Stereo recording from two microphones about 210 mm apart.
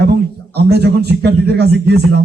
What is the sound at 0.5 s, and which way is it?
A man's voice, 50° right (ahead or behind).